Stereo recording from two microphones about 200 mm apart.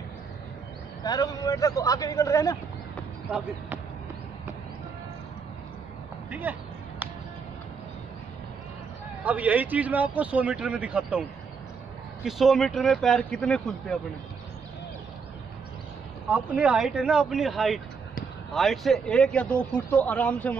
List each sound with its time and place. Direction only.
1.0 s a man's voice: 20° left (ahead or behind)
3.3 s speech: 5° right (ahead or behind)
6.5 s a man's voice: 10° right (ahead or behind)
9.2 s a man's voice: 10° right (ahead or behind)
12.3 s a man's voice: centre (ahead or behind)
16.3 s a man's voice: 5° right (ahead or behind)